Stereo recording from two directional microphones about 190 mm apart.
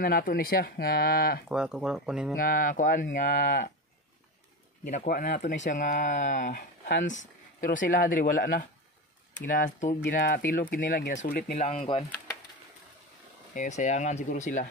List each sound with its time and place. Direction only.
0.0 s speech: 50° left (ahead or behind)
1.5 s speech: 5° right (ahead or behind)
2.3 s speech: 45° left (ahead or behind)
4.8 s speech: 45° left (ahead or behind)
7.6 s speech: 45° left (ahead or behind)
10.0 s speech: 50° left (ahead or behind)
11.5 s speech: 35° left (ahead or behind)
13.6 s speech: 40° left (ahead or behind)